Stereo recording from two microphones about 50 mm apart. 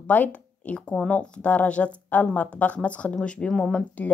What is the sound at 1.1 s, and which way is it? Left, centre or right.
Speech, left.